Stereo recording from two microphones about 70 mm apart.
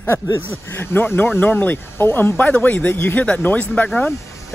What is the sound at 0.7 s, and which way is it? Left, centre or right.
Speech, left.